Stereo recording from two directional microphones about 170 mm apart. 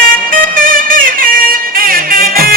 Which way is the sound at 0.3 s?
55° right (ahead or behind).